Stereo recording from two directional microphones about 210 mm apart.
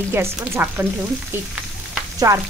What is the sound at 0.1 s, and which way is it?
Frying, 10° right (ahead or behind).